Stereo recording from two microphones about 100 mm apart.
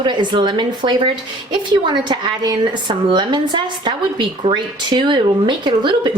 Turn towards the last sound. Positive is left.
turn(degrees=-50)  # may be behind; listen again after turning